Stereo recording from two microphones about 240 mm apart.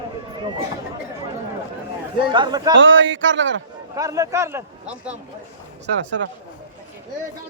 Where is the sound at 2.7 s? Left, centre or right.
Right.